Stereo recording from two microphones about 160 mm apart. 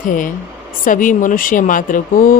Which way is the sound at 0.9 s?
55° left (ahead or behind).